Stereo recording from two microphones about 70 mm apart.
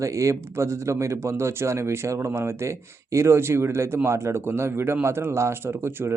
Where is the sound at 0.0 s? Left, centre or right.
Right.